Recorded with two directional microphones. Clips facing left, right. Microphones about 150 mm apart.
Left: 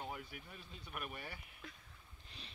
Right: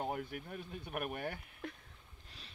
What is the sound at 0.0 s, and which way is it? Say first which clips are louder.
Speech: right 8 dB; 50° right (ahead or behind).